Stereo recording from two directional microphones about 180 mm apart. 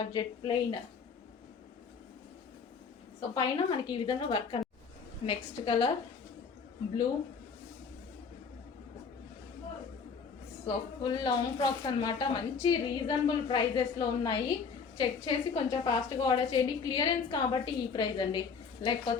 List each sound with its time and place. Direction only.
0.0 s a woman's voice: 25° left (ahead or behind)
3.3 s a woman's voice: 25° left (ahead or behind)
10.7 s a woman's voice: 25° left (ahead or behind)